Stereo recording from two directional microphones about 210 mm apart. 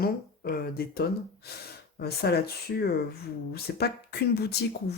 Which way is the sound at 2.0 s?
50° left (ahead or behind).